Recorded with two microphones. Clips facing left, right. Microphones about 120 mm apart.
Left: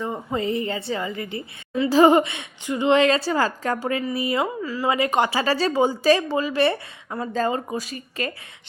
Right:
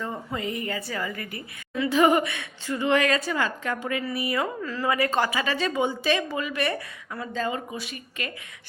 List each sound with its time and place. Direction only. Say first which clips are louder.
0.0 s a sound: left 4 dB; 20° left (ahead or behind)
0.3 s a woman's voice: left 6 dB; 30° left (ahead or behind)
4.6 s a woman's voice: left 3 dB; 10° left (ahead or behind)
4.9 s a woman's voice: left 3 dB; 20° left (ahead or behind); by 8.3 s 40° left (ahead or behind)